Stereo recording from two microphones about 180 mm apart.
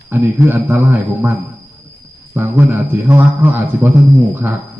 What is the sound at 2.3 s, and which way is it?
A man's voice, 10° right (ahead or behind).